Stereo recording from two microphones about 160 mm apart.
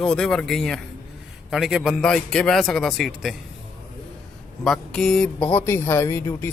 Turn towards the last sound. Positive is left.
turn(degrees=15)  # may be behind; listen again after turning